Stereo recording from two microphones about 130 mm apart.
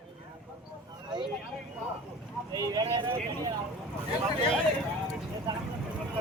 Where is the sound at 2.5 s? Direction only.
30° right (ahead or behind).